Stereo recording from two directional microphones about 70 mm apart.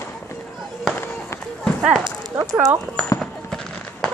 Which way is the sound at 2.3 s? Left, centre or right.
Right.